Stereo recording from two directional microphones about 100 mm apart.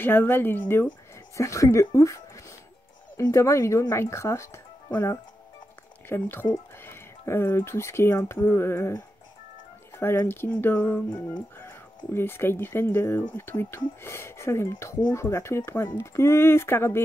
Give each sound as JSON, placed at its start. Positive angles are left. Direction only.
{"t": 0.0, "sound": "speech", "side_deg": 20}
{"t": 1.3, "sound": "speech", "side_deg": 35}
{"t": 9.9, "sound": "speech", "side_deg": 25}
{"t": 12.1, "sound": "speech", "side_deg": 25}